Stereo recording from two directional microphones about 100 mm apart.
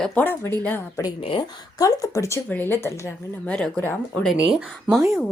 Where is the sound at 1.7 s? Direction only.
35° left (ahead or behind).